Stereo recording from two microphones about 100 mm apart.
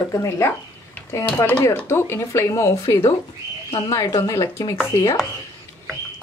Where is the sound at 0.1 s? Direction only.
30° left (ahead or behind).